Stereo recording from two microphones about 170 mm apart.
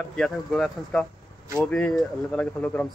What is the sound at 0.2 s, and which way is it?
Speech, centre (ahead or behind).